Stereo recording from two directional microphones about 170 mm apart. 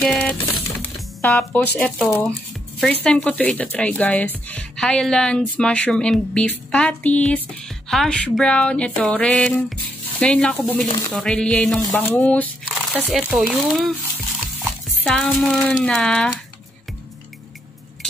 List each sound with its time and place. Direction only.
0.0 s a sound: 5° left (ahead or behind)
1.2 s speech: 10° left (ahead or behind)
12.6 s crumpling: 5° right (ahead or behind)
13.5 s speech: centre (ahead or behind)
15.0 s speech: 5° left (ahead or behind)